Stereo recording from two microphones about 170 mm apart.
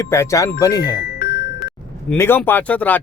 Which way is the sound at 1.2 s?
65° left (ahead or behind).